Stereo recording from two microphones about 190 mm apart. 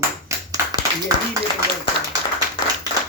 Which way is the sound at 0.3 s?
15° right (ahead or behind).